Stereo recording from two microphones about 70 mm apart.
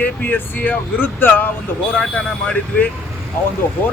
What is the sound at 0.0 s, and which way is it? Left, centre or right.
Speech, left.